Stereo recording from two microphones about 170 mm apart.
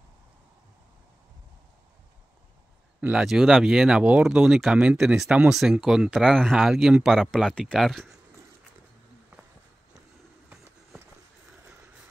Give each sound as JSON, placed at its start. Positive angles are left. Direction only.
{"t": 3.0, "sound": "speech", "side_deg": -5}